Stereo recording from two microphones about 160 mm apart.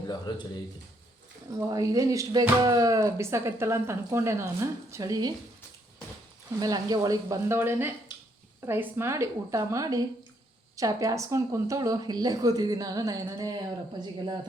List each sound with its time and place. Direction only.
0.3 s speech: 25° left (ahead or behind)
1.5 s speech: 20° right (ahead or behind)
6.6 s a woman's voice: 25° right (ahead or behind)